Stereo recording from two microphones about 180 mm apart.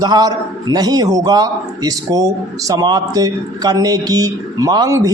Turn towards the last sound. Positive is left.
turn(degrees=-20)  # may be behind; listen again after turning